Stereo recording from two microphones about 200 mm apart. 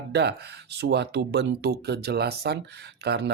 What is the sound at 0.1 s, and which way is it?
Speech, 55° right (ahead or behind).